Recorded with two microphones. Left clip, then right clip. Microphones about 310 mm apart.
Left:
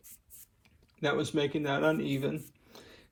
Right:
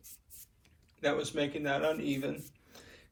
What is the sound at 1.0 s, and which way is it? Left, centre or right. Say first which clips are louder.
Speech: left 2 dB; centre.